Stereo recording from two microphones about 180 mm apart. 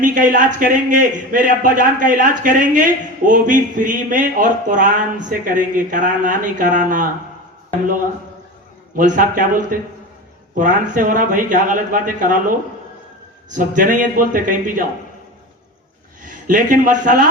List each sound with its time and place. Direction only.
0.0 s a man's voice: 45° right (ahead or behind)
9.0 s a man's voice: 50° right (ahead or behind)
16.2 s a man's voice: 45° right (ahead or behind)